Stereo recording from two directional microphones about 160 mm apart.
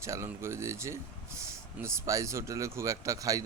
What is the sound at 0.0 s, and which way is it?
Speech, 20° right (ahead or behind).